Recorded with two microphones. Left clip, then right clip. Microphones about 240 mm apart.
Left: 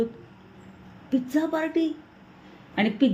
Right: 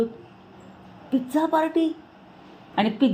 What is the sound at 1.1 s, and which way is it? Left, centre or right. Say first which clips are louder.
A woman's voice: right 3 dB; centre.